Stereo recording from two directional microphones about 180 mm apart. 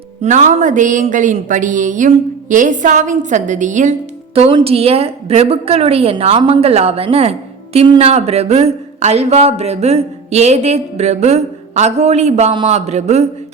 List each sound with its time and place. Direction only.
0.2 s speech: 40° right (ahead or behind)
4.4 s a woman's voice: 30° right (ahead or behind)